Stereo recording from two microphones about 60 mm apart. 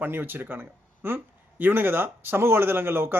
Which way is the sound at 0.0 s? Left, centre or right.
Right.